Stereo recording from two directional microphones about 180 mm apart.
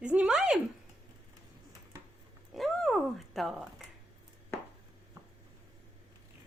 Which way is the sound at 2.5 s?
Centre (ahead or behind).